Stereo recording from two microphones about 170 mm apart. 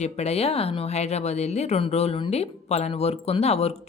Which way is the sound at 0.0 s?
40° left (ahead or behind).